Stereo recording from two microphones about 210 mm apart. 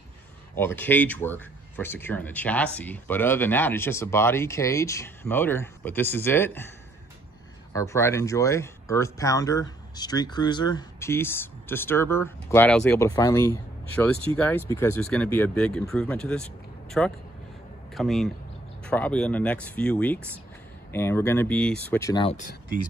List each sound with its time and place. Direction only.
0.6 s speech: 10° left (ahead or behind)
7.7 s speech: 15° left (ahead or behind)
22.2 s speech: 30° left (ahead or behind)